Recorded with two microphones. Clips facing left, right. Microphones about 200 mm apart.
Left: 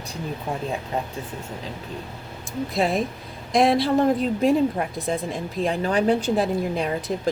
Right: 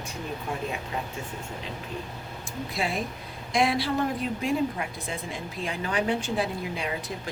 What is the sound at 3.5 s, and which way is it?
A woman's voice, 40° left (ahead or behind).